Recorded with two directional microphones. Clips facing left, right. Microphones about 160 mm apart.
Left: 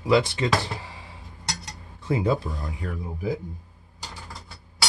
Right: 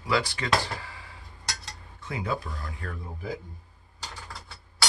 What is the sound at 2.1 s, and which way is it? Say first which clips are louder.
Speech: left 8 dB; 25° left (ahead or behind).